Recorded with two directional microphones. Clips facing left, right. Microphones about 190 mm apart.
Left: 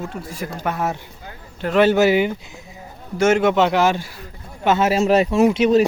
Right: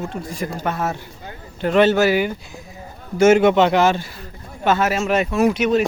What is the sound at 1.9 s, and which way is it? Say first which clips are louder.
Speech: left 1 dB; 20° left (ahead or behind).